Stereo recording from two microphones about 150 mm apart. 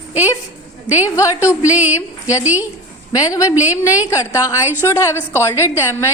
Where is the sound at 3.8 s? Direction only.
20° left (ahead or behind).